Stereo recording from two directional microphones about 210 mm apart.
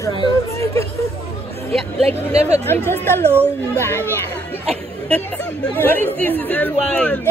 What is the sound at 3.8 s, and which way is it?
Speech, 10° left (ahead or behind).